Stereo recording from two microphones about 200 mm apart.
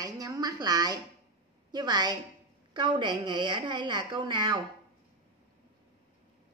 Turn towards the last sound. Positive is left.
turn(degrees=-20)  # may be behind; listen again after turning